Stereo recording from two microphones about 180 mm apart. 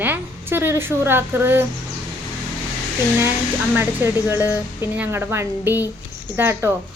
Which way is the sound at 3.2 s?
10° right (ahead or behind).